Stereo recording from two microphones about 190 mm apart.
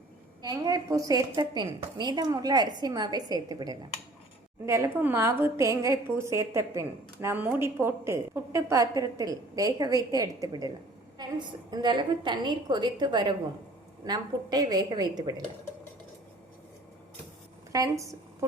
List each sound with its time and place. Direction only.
0.4 s a woman's voice: 20° right (ahead or behind)
17.7 s a woman's voice: 15° right (ahead or behind)